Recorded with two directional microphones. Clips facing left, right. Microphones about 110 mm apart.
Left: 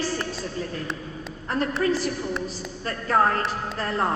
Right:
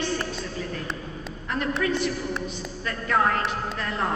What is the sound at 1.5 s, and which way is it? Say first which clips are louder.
A woman's voice: left 2 dB; 35° left (ahead or behind).